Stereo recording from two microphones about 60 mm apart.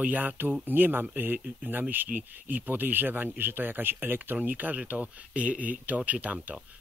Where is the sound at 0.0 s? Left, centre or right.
Right.